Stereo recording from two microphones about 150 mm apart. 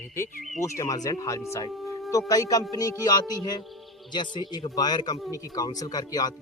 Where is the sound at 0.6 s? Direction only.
20° left (ahead or behind).